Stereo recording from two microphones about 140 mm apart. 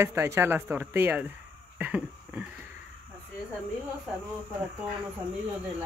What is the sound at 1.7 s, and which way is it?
Cough, 10° right (ahead or behind).